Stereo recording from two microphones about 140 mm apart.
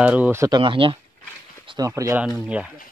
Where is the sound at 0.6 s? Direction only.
40° right (ahead or behind).